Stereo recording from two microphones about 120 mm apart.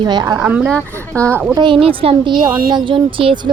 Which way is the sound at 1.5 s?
45° right (ahead or behind).